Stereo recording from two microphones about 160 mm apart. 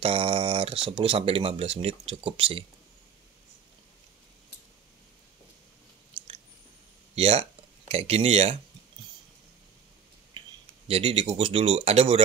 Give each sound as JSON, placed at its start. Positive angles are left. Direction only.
{"t": 0.0, "sound": "speech", "side_deg": -35}
{"t": 6.2, "sound": "chewing", "side_deg": -35}
{"t": 7.2, "sound": "speech", "side_deg": -40}
{"t": 10.4, "sound": "a sound", "side_deg": -30}
{"t": 10.9, "sound": "speech", "side_deg": -35}